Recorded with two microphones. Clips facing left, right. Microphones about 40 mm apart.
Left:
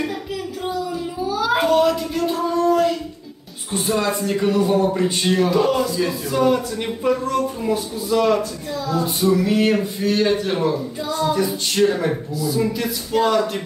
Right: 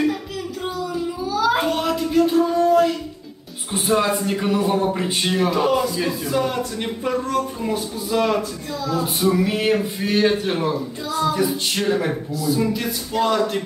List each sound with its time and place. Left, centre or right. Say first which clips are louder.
1.4 s child singing: left 4 dB; centre
3.7 s speech: right 1 dB; centre